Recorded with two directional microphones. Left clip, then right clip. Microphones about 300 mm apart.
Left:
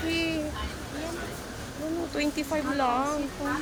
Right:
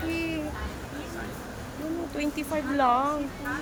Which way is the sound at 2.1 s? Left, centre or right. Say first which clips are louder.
Left 1 dB; centre.